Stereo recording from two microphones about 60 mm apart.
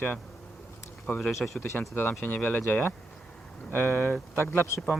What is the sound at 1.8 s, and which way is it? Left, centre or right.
Speech, left.